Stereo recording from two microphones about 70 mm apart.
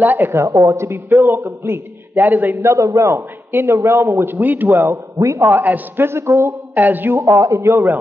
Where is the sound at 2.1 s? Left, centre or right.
Right.